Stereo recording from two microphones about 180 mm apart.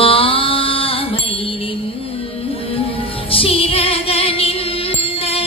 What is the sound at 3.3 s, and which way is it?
Music, 30° left (ahead or behind).